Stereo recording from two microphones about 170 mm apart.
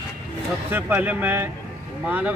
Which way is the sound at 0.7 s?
10° right (ahead or behind).